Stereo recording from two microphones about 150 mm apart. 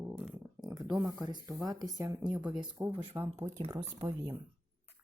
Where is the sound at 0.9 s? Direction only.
5° right (ahead or behind).